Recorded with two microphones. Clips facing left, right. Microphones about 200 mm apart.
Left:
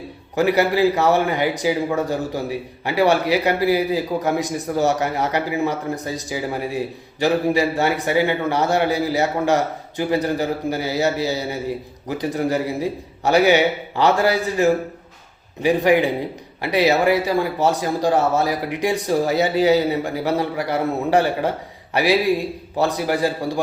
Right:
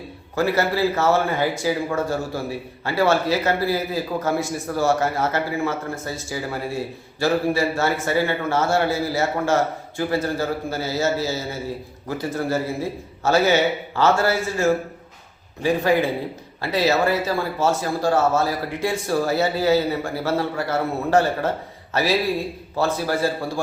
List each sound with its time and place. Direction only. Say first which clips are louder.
0.3 s a man's voice: left 3 dB; 15° left (ahead or behind)